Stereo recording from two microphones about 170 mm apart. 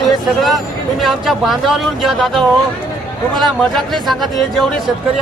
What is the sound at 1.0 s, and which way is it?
Speech, centre (ahead or behind).